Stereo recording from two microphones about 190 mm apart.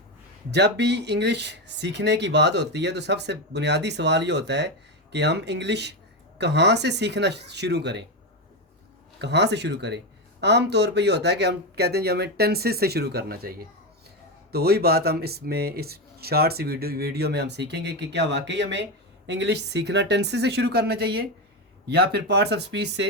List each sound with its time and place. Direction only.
0.5 s speech: 65° right (ahead or behind)
9.1 s speech: 65° right (ahead or behind)